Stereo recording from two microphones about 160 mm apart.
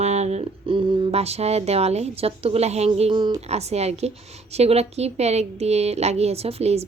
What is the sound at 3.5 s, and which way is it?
A woman's voice, 40° right (ahead or behind).